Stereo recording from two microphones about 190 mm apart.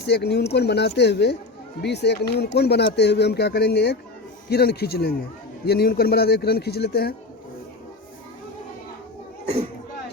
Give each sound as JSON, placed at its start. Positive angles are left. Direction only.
{"t": 0.0, "sound": "speech", "side_deg": 60}